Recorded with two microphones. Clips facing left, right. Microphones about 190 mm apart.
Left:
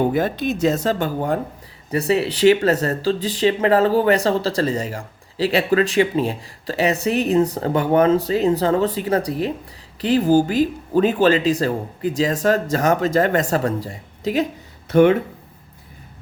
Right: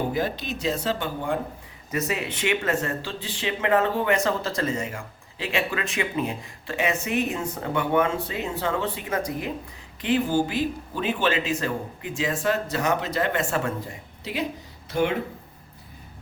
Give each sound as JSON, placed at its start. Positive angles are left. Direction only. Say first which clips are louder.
{"t": 0.1, "sound": "speech", "louder": "left 7 dB", "side_deg": 50}
{"t": 1.9, "sound": "speech", "louder": "left 8 dB", "side_deg": 30}